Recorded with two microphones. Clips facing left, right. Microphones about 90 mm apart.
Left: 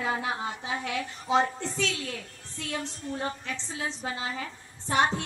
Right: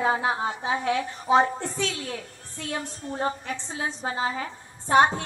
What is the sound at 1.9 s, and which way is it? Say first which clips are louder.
A woman's voice: right 3 dB; 25° right (ahead or behind).